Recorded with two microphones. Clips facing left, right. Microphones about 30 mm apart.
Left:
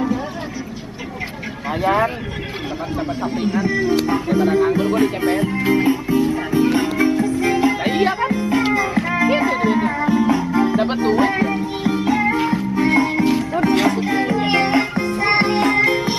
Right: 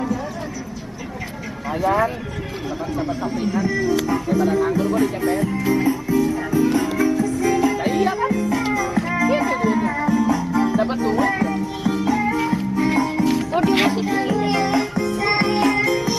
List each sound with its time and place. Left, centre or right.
1.7 s speech: left
3.9 s speech: left
7.0 s music: left
11.9 s music: left
12.2 s music: left
13.3 s music: left
14.0 s music: left
15.1 s music: left